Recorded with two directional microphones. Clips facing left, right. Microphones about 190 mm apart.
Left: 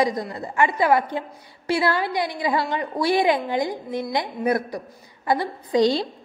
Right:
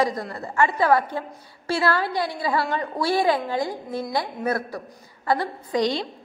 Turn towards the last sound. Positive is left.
turn(degrees=30)  # may be behind; listen again after turning